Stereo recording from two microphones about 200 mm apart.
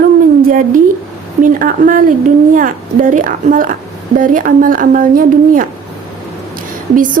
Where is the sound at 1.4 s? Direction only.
45° right (ahead or behind).